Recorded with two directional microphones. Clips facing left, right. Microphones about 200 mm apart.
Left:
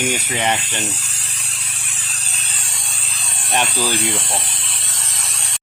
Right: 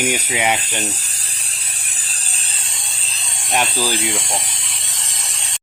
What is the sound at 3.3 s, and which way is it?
Speech, 15° right (ahead or behind).